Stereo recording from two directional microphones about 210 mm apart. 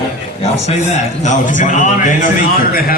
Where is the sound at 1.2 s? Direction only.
35° left (ahead or behind).